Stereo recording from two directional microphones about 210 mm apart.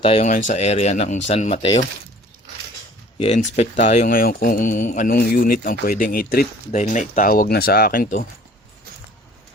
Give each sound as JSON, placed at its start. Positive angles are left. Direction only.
{"t": 0.0, "sound": "speech", "side_deg": 30}
{"t": 3.2, "sound": "speech", "side_deg": 30}